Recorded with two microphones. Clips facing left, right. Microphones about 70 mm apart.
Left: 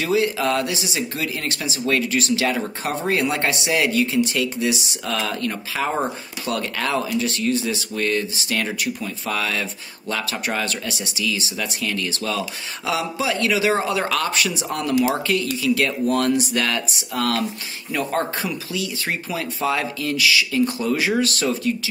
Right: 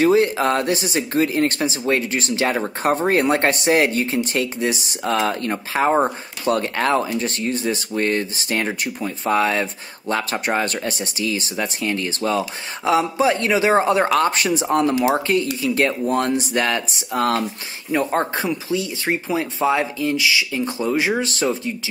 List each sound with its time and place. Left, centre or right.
0.0 s speech: right